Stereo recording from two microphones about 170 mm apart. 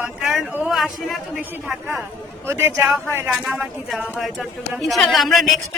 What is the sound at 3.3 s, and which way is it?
A woman's voice, centre (ahead or behind).